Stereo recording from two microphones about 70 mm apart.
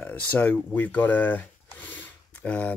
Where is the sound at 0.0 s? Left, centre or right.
Left.